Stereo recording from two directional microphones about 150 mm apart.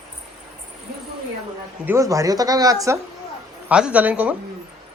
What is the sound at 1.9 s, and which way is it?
Speech, 20° right (ahead or behind).